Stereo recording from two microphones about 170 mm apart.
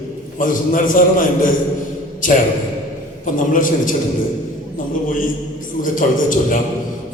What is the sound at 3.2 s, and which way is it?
A man's voice, 50° left (ahead or behind).